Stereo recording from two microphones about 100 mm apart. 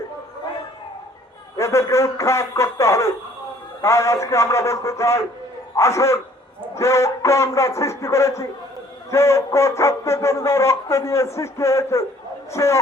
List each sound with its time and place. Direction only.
1.5 s a man's voice: 30° left (ahead or behind)